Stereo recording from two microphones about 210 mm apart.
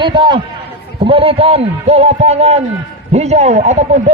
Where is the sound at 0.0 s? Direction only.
20° right (ahead or behind).